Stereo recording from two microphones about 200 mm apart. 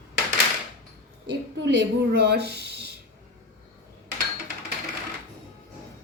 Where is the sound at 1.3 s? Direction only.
60° right (ahead or behind).